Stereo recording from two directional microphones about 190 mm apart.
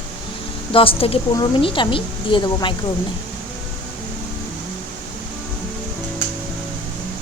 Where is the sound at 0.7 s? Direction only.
30° left (ahead or behind).